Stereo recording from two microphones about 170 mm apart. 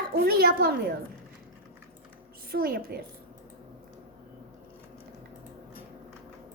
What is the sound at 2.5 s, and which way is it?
Speech, 65° right (ahead or behind).